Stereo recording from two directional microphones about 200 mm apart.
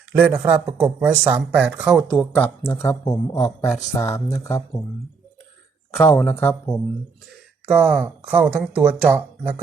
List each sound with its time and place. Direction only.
0.1 s speech: 10° right (ahead or behind)
2.3 s speech: 10° left (ahead or behind)
5.9 s speech: 10° left (ahead or behind)
7.7 s speech: 5° right (ahead or behind)